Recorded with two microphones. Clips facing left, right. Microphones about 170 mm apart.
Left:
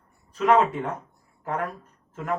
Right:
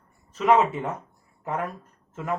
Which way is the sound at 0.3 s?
5° right (ahead or behind).